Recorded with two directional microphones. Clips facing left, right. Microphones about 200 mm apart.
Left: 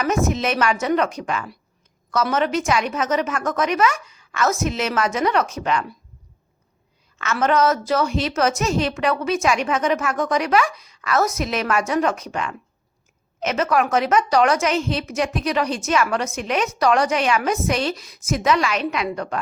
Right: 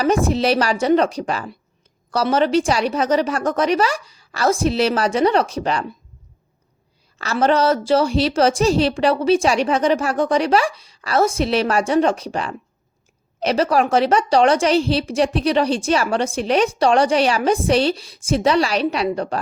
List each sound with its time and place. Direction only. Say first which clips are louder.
0.0 s a woman's voice: right 4 dB; 30° right (ahead or behind)
7.2 s a woman's voice: right 2 dB; 35° right (ahead or behind)